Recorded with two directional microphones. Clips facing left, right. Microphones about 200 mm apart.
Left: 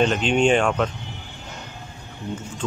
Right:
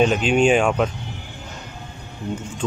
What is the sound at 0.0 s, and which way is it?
Speech, 5° right (ahead or behind).